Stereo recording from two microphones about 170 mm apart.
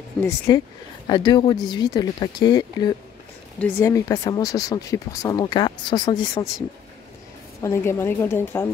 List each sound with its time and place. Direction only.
0.2 s speech: 5° left (ahead or behind)
1.0 s speech: 25° left (ahead or behind)
3.5 s speech: 10° left (ahead or behind)
7.6 s a woman's voice: 15° left (ahead or behind)